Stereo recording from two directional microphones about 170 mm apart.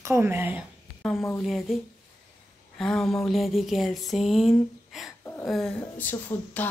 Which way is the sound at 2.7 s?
5° left (ahead or behind).